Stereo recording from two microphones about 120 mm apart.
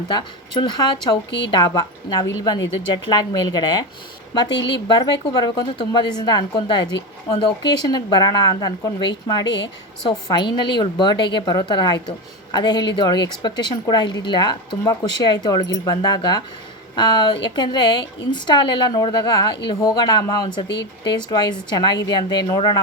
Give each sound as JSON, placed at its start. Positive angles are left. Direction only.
{"t": 0.1, "sound": "a woman's voice", "side_deg": 40}
{"t": 4.9, "sound": "a woman's voice", "side_deg": 35}